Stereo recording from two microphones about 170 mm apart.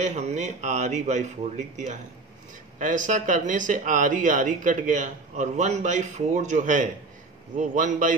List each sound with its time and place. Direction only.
0.0 s a man's voice: 40° right (ahead or behind)